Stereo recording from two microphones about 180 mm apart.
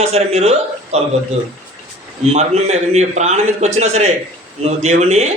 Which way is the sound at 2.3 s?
40° right (ahead or behind).